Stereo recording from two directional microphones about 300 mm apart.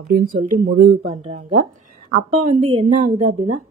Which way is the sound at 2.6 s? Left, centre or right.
Right.